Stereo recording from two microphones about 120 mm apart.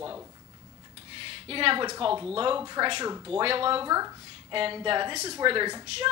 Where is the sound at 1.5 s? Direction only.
45° right (ahead or behind).